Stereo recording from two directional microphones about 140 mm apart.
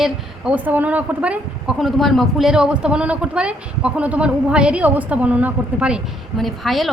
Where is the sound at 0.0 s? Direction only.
10° right (ahead or behind).